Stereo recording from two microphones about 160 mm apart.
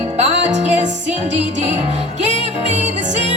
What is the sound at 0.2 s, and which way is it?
Music, 45° right (ahead or behind).